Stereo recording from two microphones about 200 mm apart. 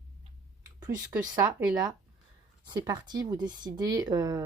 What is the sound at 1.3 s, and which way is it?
A woman's voice, 20° right (ahead or behind).